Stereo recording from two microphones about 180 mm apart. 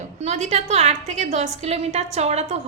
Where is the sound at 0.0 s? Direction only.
40° right (ahead or behind).